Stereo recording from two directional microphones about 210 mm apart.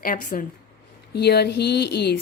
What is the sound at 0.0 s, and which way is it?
Speech, 40° left (ahead or behind).